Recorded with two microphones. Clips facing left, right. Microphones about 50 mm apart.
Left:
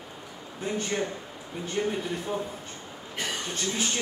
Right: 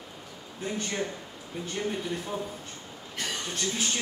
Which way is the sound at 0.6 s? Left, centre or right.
Centre.